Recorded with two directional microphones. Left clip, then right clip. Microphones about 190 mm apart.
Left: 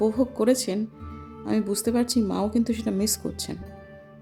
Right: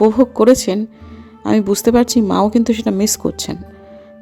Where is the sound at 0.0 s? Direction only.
35° right (ahead or behind).